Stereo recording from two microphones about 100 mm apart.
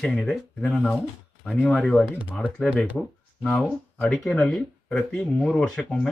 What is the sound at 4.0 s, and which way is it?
Speech, 5° left (ahead or behind).